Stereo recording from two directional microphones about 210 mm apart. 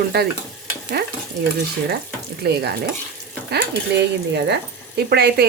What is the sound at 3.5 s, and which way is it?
Speech, 50° right (ahead or behind).